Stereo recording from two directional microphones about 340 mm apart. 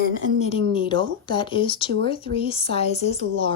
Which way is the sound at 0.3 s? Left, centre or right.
Centre.